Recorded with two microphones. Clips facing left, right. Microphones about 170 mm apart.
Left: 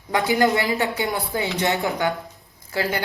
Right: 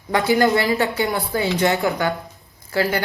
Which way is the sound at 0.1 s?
15° left (ahead or behind).